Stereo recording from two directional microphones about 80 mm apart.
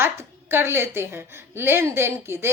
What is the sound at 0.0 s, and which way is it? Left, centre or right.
A woman's voice, right.